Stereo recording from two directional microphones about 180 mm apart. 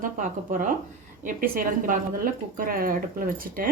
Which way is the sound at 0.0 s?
50° right (ahead or behind).